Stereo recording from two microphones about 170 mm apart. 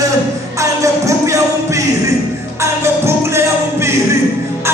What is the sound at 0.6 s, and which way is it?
Music, 20° right (ahead or behind).